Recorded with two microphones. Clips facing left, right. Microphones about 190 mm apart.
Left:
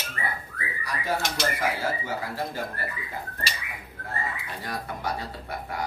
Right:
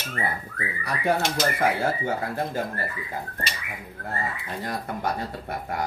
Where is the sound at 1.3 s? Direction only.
45° right (ahead or behind).